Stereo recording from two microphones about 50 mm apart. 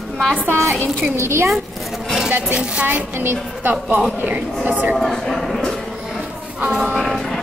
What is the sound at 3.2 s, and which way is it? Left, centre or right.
Speech, right.